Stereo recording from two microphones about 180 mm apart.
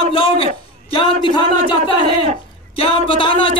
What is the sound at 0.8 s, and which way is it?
A man's voice, 30° left (ahead or behind).